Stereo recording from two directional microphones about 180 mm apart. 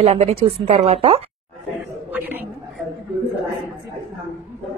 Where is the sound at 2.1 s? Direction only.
10° right (ahead or behind).